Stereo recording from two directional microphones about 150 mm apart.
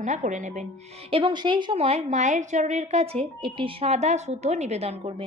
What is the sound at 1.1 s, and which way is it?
Speech, 30° right (ahead or behind).